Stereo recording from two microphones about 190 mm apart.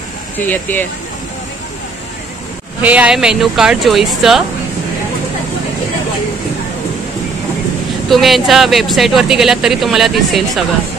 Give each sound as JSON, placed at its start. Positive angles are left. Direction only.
{"t": 0.4, "sound": "speech", "side_deg": 10}
{"t": 2.8, "sound": "speech", "side_deg": -5}
{"t": 8.1, "sound": "speech", "side_deg": 0}